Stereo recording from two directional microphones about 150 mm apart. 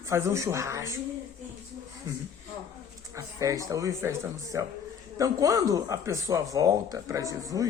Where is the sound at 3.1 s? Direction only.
20° right (ahead or behind).